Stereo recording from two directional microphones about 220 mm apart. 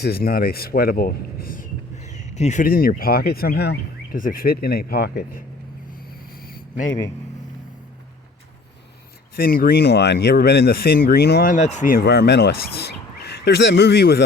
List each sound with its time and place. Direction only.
0.0 s speech: 40° left (ahead or behind)
6.5 s a sound: 35° left (ahead or behind)
9.3 s speech: 40° left (ahead or behind)